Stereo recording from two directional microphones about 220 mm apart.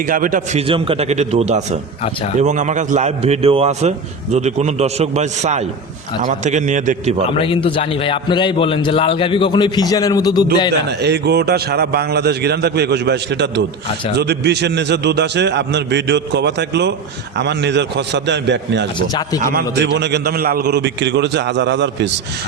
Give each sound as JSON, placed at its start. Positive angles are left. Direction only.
{"t": 0.1, "sound": "a man's voice", "side_deg": -35}
{"t": 0.7, "sound": "a man's voice", "side_deg": -25}
{"t": 7.3, "sound": "a man's voice", "side_deg": 25}
{"t": 10.8, "sound": "a man's voice", "side_deg": -50}
{"t": 19.4, "sound": "a man's voice", "side_deg": -40}